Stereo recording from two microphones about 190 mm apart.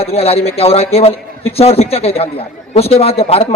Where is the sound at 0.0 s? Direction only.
30° left (ahead or behind).